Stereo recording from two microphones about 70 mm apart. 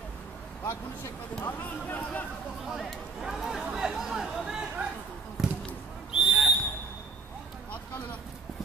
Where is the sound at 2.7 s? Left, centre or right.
Centre.